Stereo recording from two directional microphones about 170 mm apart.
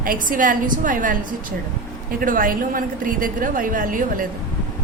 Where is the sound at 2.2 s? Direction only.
55° right (ahead or behind).